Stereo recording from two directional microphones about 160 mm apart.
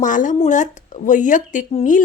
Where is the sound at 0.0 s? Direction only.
55° left (ahead or behind).